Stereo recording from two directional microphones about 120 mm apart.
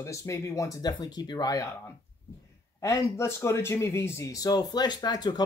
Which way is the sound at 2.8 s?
25° left (ahead or behind).